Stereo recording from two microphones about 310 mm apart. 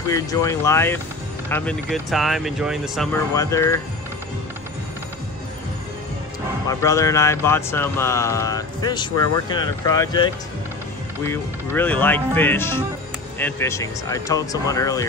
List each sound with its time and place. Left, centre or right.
0.1 s speech: centre
6.7 s speech: centre